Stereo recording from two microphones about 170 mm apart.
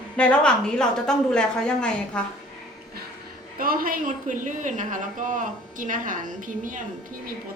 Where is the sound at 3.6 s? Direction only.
60° right (ahead or behind).